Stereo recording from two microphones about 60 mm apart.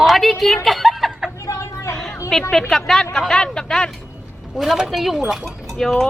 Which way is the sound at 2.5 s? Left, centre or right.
Centre.